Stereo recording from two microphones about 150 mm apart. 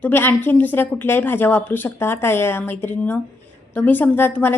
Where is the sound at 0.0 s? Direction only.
15° left (ahead or behind).